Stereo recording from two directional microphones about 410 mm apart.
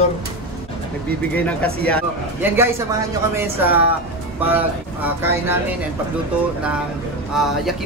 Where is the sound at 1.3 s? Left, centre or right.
Centre.